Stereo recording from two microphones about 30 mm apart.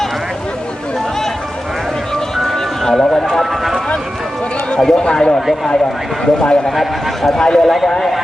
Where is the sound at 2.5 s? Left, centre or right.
Centre.